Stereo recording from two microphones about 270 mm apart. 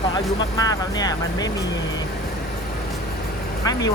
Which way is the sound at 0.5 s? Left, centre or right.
Centre.